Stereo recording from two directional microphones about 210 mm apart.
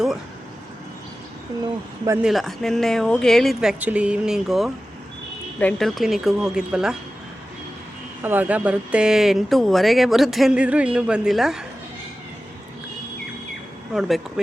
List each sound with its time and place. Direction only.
2.2 s speech: centre (ahead or behind)
8.2 s speech: 10° right (ahead or behind)
13.9 s speech: centre (ahead or behind)